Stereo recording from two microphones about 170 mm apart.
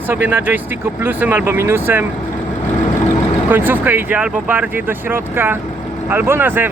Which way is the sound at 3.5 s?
10° right (ahead or behind).